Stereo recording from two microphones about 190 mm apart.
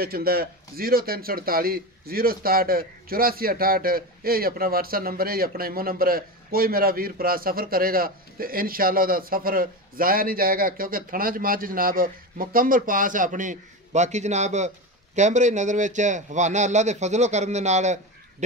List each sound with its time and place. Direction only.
0.0 s a man's voice: 55° right (ahead or behind); by 18.0 s 35° right (ahead or behind)